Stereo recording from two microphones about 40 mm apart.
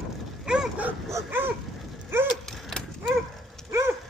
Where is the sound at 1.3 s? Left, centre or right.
Right.